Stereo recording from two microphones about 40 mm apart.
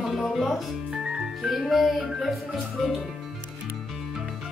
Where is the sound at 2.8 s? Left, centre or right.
Centre.